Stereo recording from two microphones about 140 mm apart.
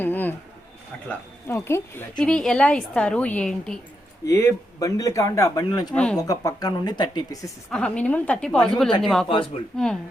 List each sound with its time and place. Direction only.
0.0 s a sound: 15° left (ahead or behind)
1.0 s a woman's voice: 15° left (ahead or behind)
2.1 s a woman's voice: 5° left (ahead or behind)
4.3 s a man's voice: 20° left (ahead or behind)
5.9 s a woman's voice: 10° left (ahead or behind)
6.1 s a man's voice: 25° left (ahead or behind)
7.7 s a woman's voice: 5° left (ahead or behind)